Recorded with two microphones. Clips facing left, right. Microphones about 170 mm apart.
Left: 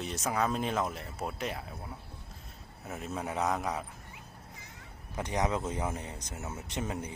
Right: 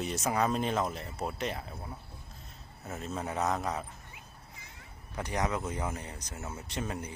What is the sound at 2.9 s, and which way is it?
Speech, 10° left (ahead or behind).